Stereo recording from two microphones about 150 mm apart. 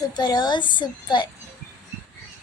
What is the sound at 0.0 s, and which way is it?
A child's voice, 25° left (ahead or behind).